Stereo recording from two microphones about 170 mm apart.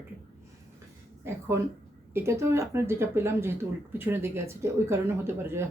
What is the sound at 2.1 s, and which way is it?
Speech, 15° right (ahead or behind).